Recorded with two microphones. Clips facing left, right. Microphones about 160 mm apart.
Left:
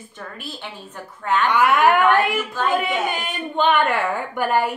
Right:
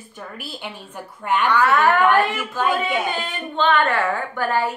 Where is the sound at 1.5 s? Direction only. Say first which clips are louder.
Left 1 dB; 15° left (ahead or behind).